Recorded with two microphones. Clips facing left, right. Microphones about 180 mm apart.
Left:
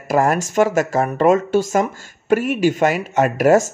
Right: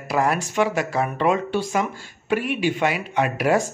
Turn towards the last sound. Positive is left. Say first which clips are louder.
# left 6 dB
turn(degrees=45)  # may be behind; listen again after turning